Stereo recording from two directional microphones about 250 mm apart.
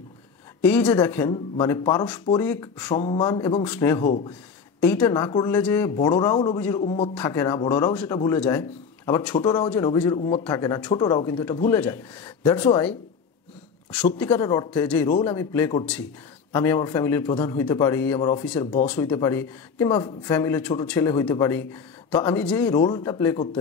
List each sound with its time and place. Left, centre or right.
0.6 s a man's voice: centre
3.0 s a man's voice: centre
5.1 s a man's voice: centre
5.5 s a man's voice: centre
7.9 s a man's voice: centre
9.6 s a man's voice: centre
10.1 s a man's voice: left
14.1 s a man's voice: centre
22.8 s a man's voice: centre